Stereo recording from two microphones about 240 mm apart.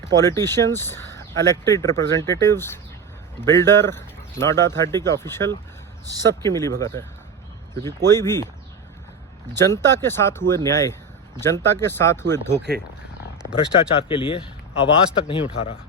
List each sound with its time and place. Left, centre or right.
0.2 s speech: centre
9.6 s speech: centre
14.1 s a man's voice: left